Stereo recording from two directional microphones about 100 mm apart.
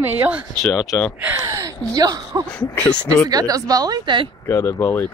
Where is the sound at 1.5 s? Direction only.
35° right (ahead or behind).